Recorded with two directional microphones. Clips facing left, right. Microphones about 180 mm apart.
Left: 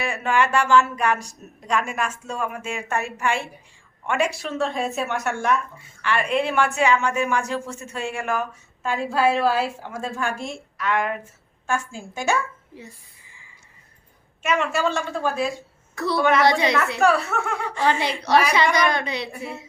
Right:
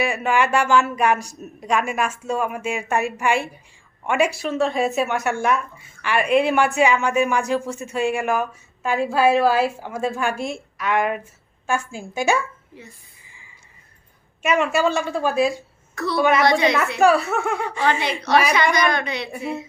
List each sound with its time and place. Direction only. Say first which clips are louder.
0.0 s speech: right 2 dB; 10° right (ahead or behind)
14.4 s speech: right 3 dB; 10° right (ahead or behind)
16.4 s a woman's voice: right 1 dB; 30° left (ahead or behind)
17.0 s speech: right 5 dB; 10° right (ahead or behind)
18.2 s a woman's voice: even; 35° left (ahead or behind)
19.3 s speech: right 6 dB; 15° right (ahead or behind)